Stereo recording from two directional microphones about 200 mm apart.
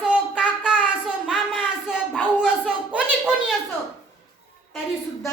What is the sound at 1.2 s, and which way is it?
Speech, 5° right (ahead or behind).